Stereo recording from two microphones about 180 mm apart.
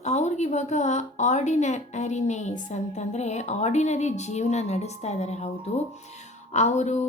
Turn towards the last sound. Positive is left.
turn(degrees=40)  # may be behind; listen again after turning